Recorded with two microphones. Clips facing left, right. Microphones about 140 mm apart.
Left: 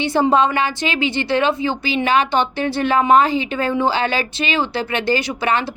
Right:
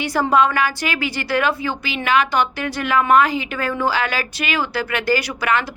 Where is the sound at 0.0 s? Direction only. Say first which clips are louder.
Left 2 dB; 25° left (ahead or behind).